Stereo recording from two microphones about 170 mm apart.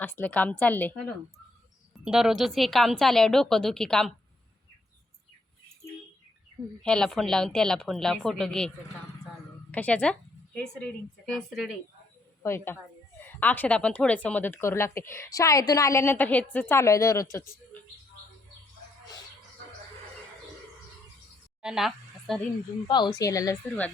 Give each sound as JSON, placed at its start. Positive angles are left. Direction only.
{"t": 0.0, "sound": "speech", "side_deg": 10}
{"t": 2.0, "sound": "a woman's voice", "side_deg": 0}
{"t": 6.8, "sound": "a woman's voice", "side_deg": 5}
{"t": 9.7, "sound": "a woman's voice", "side_deg": 10}
{"t": 12.4, "sound": "a woman's voice", "side_deg": 15}
{"t": 21.6, "sound": "a sound", "side_deg": -5}
{"t": 22.9, "sound": "a woman's voice", "side_deg": 25}
{"t": 23.6, "sound": "speech", "side_deg": 10}